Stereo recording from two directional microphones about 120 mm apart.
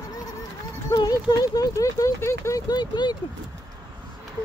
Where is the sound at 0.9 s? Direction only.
35° left (ahead or behind).